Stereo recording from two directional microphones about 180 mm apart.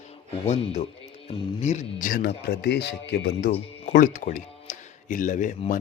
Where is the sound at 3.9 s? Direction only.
45° left (ahead or behind).